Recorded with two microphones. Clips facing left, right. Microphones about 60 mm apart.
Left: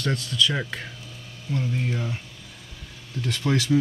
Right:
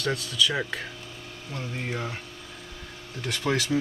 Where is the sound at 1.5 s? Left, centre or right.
Right.